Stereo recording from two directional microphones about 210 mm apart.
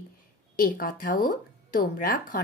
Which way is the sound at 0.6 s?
40° left (ahead or behind).